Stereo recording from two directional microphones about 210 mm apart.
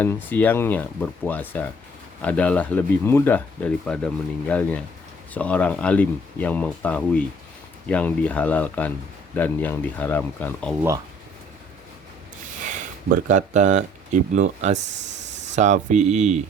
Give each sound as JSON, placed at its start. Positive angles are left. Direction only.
{"t": 0.0, "sound": "speech", "side_deg": 10}
{"t": 13.2, "sound": "speech", "side_deg": -35}